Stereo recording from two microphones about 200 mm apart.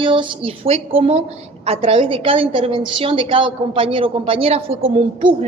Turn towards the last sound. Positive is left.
turn(degrees=-25)  # may be behind; listen again after turning